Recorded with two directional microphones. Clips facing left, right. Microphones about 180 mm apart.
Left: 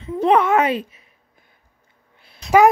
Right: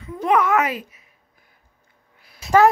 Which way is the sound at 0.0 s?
25° left (ahead or behind).